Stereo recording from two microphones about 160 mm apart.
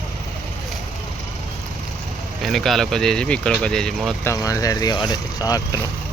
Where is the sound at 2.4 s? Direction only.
Centre (ahead or behind).